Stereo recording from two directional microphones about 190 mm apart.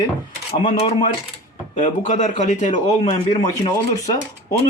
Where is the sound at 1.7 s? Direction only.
40° left (ahead or behind).